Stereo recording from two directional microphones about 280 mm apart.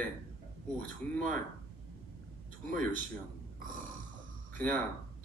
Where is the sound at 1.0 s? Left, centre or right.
Centre.